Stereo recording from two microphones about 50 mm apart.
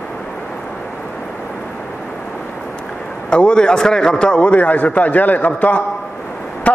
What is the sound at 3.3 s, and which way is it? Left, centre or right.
A man's voice, centre.